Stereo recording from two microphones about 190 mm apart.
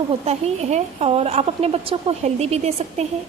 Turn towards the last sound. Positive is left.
turn(degrees=-35)  # may be behind; listen again after turning